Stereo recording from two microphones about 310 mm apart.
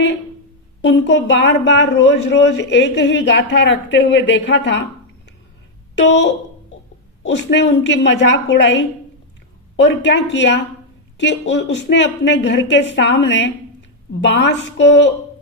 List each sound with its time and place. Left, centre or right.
0.8 s a woman's voice: left
6.0 s a woman's voice: left